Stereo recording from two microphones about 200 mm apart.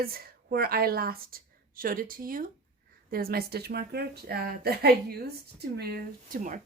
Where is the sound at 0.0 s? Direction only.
50° right (ahead or behind).